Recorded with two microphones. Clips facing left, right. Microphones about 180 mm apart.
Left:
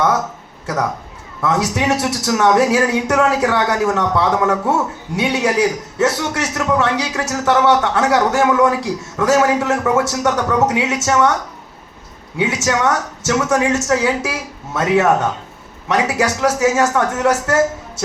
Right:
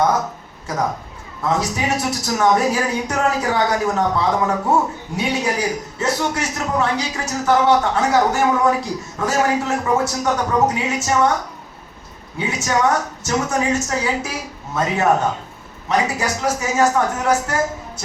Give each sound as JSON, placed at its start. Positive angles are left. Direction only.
{"t": 1.4, "sound": "a woman's voice", "side_deg": 80}
{"t": 12.4, "sound": "a woman's voice", "side_deg": 80}